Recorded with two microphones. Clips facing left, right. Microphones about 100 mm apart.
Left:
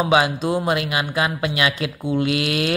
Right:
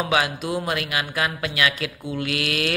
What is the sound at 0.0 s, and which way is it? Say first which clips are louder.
Speech: left 5 dB; 25° left (ahead or behind).